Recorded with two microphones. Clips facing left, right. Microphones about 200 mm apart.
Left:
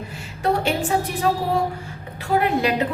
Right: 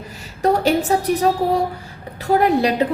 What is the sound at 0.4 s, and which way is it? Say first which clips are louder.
A woman's voice: right 5 dB; 40° right (ahead or behind).